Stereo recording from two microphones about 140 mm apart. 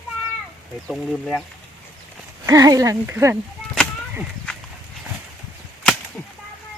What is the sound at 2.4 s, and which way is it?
Speech, 25° right (ahead or behind).